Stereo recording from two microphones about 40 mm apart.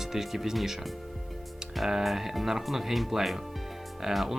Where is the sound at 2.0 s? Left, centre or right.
Centre.